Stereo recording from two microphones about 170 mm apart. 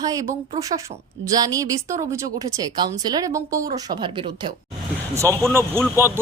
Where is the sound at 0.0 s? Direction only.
20° right (ahead or behind).